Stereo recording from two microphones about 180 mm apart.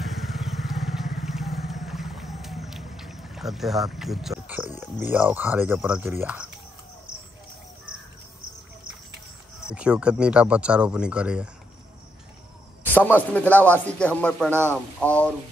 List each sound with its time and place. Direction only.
0.0 s vehicle: centre (ahead or behind)
5.0 s speech: 10° right (ahead or behind)
9.7 s speech: 5° right (ahead or behind)
12.8 s speech: 10° left (ahead or behind)